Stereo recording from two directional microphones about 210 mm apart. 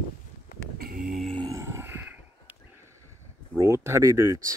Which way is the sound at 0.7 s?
45° right (ahead or behind).